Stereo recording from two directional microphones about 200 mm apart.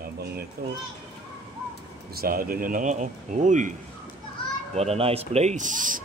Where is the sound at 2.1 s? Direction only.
50° right (ahead or behind).